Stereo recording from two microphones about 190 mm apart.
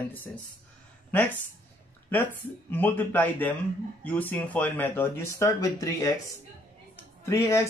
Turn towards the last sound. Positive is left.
turn(degrees=15)  # may be behind; listen again after turning